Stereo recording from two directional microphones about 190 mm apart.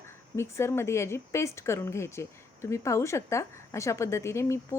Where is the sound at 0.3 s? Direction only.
15° left (ahead or behind).